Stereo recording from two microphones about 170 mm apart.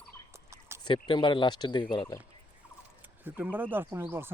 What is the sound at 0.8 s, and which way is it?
Speech, 25° left (ahead or behind).